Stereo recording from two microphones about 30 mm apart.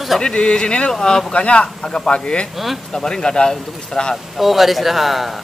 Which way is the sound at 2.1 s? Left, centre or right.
Left.